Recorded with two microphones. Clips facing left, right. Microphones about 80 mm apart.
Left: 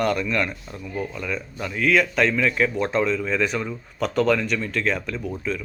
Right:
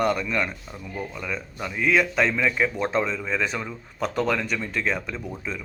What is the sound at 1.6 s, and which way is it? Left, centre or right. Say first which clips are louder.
Speech: left 1 dB; centre.